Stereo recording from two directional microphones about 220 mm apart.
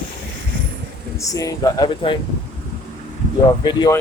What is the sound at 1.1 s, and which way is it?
Speech, 15° left (ahead or behind).